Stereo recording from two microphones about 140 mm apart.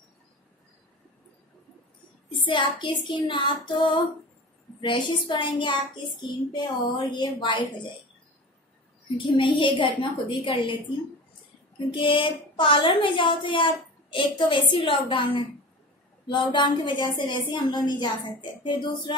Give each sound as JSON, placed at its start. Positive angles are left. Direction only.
{"t": 2.4, "sound": "a woman's voice", "side_deg": 35}
{"t": 9.4, "sound": "a woman's voice", "side_deg": 35}
{"t": 11.9, "sound": "a woman's voice", "side_deg": 35}